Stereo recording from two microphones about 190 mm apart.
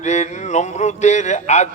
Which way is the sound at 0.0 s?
40° left (ahead or behind).